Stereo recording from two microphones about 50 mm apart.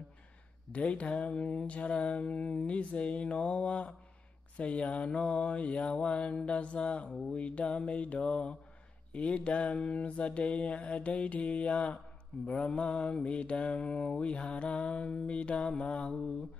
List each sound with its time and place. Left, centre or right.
0.7 s mantra: left